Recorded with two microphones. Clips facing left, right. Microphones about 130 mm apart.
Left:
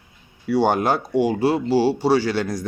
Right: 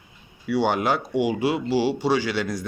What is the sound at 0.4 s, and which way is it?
Speech, 40° left (ahead or behind).